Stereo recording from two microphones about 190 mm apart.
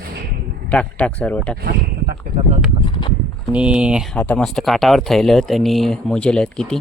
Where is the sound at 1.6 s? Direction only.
55° right (ahead or behind).